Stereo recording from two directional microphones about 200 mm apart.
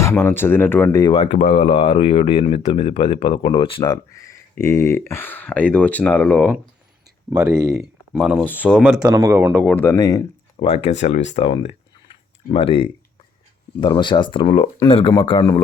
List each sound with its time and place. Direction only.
0.0 s speech: 10° left (ahead or behind)
1.1 s speech: 30° left (ahead or behind); by 6.6 s 5° left (ahead or behind)
7.8 s speech: 5° right (ahead or behind)
8.4 s speech: 10° left (ahead or behind)
8.8 s speech: 5° right (ahead or behind)
9.6 s speech: 5° left (ahead or behind)